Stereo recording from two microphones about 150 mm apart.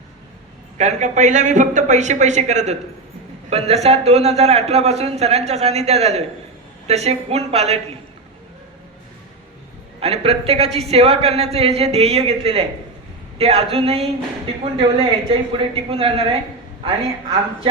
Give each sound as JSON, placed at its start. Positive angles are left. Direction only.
{"t": 0.8, "sound": "a man's voice", "side_deg": -50}
{"t": 10.0, "sound": "a woman's voice", "side_deg": -40}